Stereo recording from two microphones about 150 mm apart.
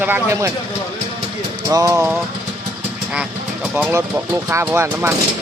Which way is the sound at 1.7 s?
25° right (ahead or behind).